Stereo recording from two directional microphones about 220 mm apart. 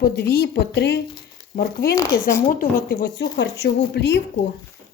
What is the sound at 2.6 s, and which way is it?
Speech, 40° left (ahead or behind).